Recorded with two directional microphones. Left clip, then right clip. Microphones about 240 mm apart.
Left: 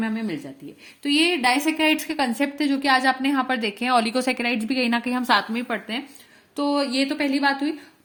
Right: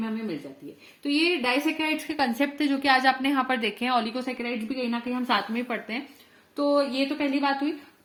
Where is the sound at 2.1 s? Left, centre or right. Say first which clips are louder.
Left 2 dB; left.